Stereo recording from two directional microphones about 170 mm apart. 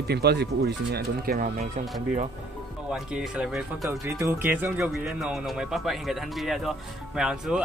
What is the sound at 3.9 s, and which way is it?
Speech, 15° right (ahead or behind).